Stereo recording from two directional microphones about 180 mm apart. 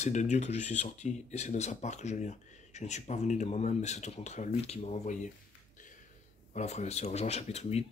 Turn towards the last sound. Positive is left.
turn(degrees=35)  # may be behind; listen again after turning